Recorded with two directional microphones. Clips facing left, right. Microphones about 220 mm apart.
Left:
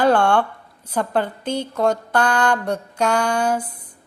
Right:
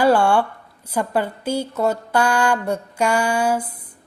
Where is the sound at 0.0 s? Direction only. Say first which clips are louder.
Right 1 dB; 5° right (ahead or behind).